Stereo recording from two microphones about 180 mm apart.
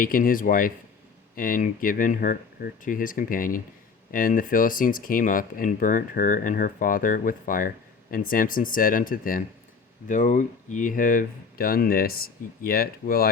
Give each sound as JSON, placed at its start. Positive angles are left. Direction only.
{"t": 0.0, "sound": "speech", "side_deg": 50}